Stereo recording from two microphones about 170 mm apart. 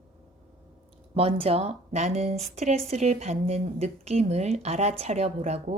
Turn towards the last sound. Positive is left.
turn(degrees=-40)  # may be behind; listen again after turning